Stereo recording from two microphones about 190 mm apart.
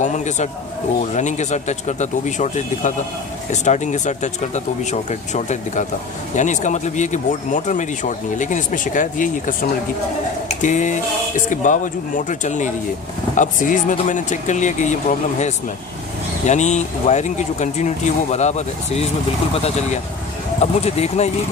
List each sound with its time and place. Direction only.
0.0 s speech: 40° left (ahead or behind)
16.5 s speech: 35° left (ahead or behind)